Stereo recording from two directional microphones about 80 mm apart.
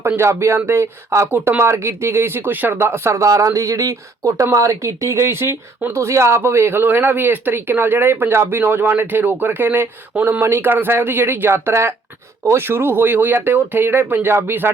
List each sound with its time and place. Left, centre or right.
0.2 s speech: right